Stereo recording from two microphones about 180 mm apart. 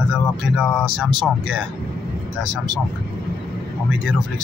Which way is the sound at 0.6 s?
Centre (ahead or behind).